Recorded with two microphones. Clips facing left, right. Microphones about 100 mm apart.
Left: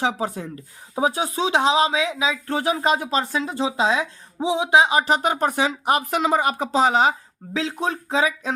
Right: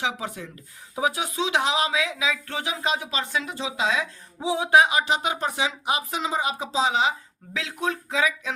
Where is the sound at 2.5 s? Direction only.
40° left (ahead or behind); by 4.9 s 20° left (ahead or behind).